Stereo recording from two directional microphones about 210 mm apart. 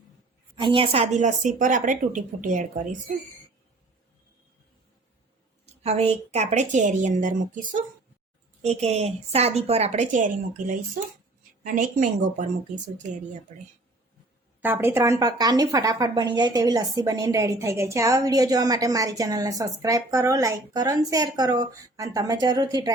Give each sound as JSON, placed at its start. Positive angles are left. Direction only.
{"t": 0.5, "sound": "speech", "side_deg": -25}
{"t": 5.8, "sound": "speech", "side_deg": -30}
{"t": 14.6, "sound": "speech", "side_deg": -10}